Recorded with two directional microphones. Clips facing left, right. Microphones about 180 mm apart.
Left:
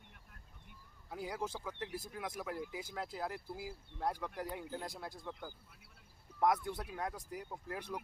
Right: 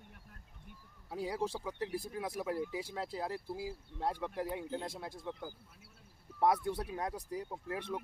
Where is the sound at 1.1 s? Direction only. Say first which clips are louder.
Right 4 dB; 30° right (ahead or behind).